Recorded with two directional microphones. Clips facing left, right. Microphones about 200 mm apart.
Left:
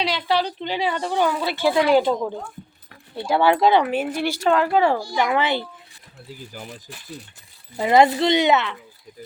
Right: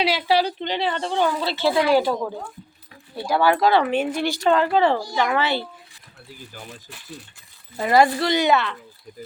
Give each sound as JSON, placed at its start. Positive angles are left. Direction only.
{"t": 0.0, "sound": "a woman's voice", "side_deg": -5}
{"t": 0.6, "sound": "a woman's voice", "side_deg": 10}
{"t": 3.9, "sound": "a woman's voice", "side_deg": 5}
{"t": 7.8, "sound": "a woman's voice", "side_deg": 20}